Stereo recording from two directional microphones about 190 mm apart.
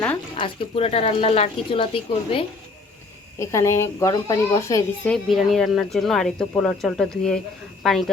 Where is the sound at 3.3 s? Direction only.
15° left (ahead or behind).